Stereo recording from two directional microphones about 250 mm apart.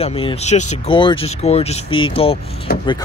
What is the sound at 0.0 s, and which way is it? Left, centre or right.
Speech, left.